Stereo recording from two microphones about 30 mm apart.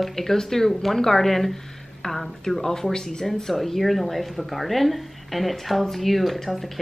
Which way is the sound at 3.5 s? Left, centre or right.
Centre.